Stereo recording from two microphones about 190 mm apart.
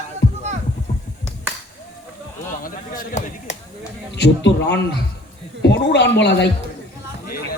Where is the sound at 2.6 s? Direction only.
45° left (ahead or behind).